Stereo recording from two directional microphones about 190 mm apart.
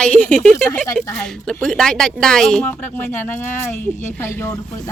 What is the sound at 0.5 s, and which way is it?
Speech, 15° left (ahead or behind).